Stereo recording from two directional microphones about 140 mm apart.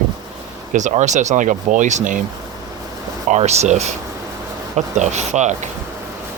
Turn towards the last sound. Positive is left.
turn(degrees=-55)  # may be behind; listen again after turning